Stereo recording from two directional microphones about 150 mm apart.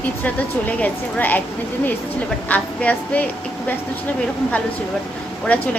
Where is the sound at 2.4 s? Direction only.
10° left (ahead or behind).